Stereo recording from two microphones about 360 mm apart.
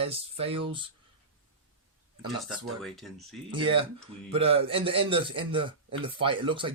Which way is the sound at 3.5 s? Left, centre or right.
Centre.